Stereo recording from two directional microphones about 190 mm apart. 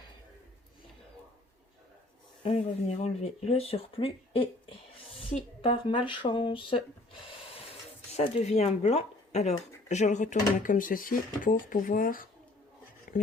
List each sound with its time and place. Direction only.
2.4 s speech: 35° left (ahead or behind)
8.1 s speech: 35° left (ahead or behind)